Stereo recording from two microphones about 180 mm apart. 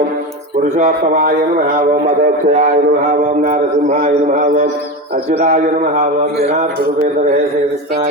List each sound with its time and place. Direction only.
1.5 s a man's voice: 50° right (ahead or behind)
5.3 s a man's voice: 35° right (ahead or behind)